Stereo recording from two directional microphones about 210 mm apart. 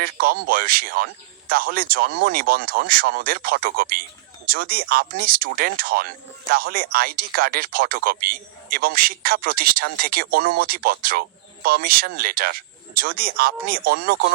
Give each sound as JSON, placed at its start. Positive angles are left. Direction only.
{"t": 0.0, "sound": "speech", "side_deg": -45}